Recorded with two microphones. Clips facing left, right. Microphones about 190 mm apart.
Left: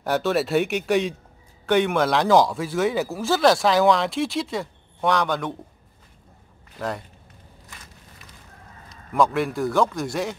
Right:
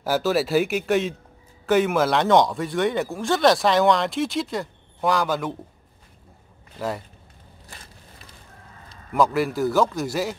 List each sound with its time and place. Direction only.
0.0 s speech: centre (ahead or behind)
7.6 s a sound: 35° right (ahead or behind)
9.1 s speech: centre (ahead or behind)